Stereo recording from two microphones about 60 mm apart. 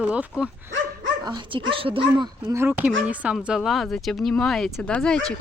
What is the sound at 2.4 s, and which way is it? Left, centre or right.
Speech, right.